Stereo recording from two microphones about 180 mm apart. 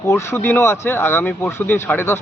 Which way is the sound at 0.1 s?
15° left (ahead or behind).